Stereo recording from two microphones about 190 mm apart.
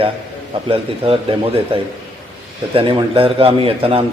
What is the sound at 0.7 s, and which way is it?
A man's voice, 30° right (ahead or behind).